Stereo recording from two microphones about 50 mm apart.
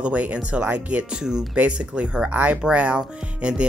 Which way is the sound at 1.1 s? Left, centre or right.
Centre.